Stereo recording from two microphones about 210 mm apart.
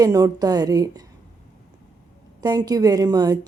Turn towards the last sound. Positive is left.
turn(degrees=-20)  # may be behind; listen again after turning